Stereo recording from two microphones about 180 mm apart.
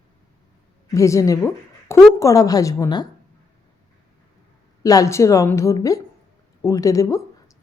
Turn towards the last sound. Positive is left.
turn(degrees=20)  # may be behind; listen again after turning